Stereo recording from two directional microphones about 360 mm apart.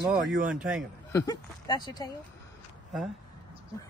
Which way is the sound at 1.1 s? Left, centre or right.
Centre.